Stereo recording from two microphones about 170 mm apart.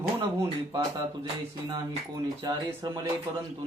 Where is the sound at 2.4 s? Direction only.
20° right (ahead or behind).